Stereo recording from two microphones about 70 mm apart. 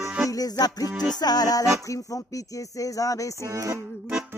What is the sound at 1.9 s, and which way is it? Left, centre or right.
Speech, left.